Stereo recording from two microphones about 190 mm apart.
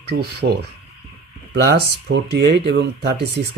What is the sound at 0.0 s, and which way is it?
Speech, 60° right (ahead or behind).